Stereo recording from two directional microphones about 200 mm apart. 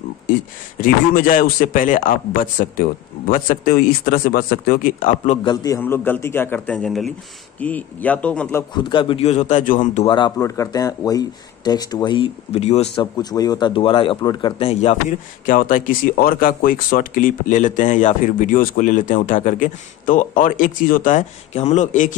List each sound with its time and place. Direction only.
0.7 s a man's voice: 45° left (ahead or behind)
5.4 s a man's voice: 20° left (ahead or behind)
8.7 s speech: 25° left (ahead or behind); by 10.0 s 40° left (ahead or behind)
10.0 s speech: 25° left (ahead or behind)
13.0 s speech: 20° left (ahead or behind); by 22.1 s 40° left (ahead or behind)